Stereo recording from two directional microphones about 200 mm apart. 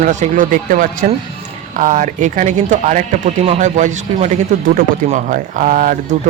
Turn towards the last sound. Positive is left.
turn(degrees=-40)  # may be behind; listen again after turning